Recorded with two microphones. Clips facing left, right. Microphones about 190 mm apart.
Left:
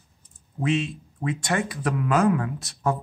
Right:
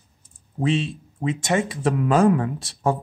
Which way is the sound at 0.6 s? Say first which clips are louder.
Right 2 dB; 30° right (ahead or behind).